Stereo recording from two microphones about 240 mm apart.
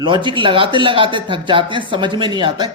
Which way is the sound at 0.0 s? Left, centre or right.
Centre.